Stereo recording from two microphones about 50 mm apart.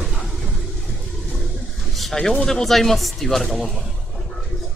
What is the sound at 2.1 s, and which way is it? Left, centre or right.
Speech, centre.